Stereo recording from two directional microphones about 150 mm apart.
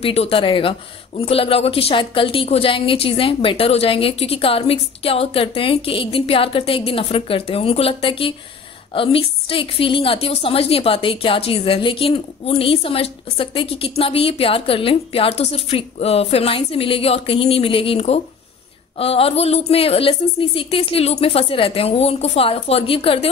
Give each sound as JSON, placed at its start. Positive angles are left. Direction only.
{"t": 0.0, "sound": "a woman's voice", "side_deg": 40}